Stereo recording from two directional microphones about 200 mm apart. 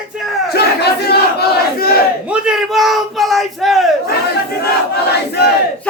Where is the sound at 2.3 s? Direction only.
5° right (ahead or behind).